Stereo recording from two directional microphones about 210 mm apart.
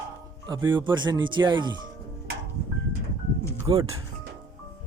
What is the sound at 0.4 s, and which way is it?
Speech, 20° right (ahead or behind).